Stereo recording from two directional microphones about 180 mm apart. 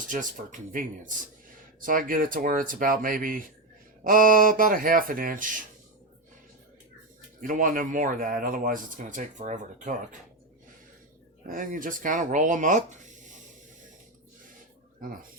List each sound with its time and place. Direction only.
0.0 s speech: 45° right (ahead or behind)
7.4 s speech: 45° right (ahead or behind)
11.5 s speech: 45° right (ahead or behind)